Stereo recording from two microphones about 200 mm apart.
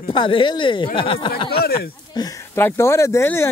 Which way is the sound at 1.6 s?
50° left (ahead or behind).